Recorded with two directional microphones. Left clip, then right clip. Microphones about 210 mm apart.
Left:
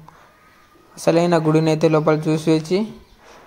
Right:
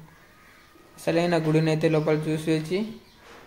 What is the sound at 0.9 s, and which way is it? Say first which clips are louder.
A man's voice: left 7 dB; 25° left (ahead or behind).